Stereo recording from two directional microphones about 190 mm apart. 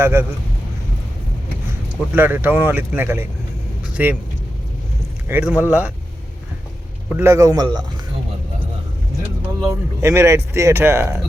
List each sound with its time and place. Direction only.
0.0 s speech: 15° right (ahead or behind)
2.1 s speech: 10° right (ahead or behind)
5.3 s speech: 10° right (ahead or behind)
7.1 s speech: 15° right (ahead or behind)
9.6 s speech: 15° right (ahead or behind)